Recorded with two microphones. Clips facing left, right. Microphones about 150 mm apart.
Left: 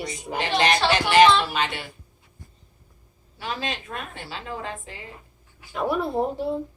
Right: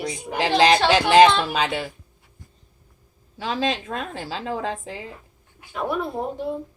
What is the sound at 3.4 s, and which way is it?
Speech, 90° right.